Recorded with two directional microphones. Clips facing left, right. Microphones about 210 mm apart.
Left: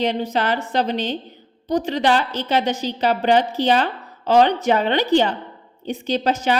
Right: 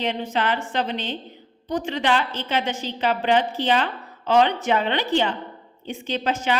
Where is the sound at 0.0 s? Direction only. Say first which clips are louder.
Left 4 dB; 35° left (ahead or behind).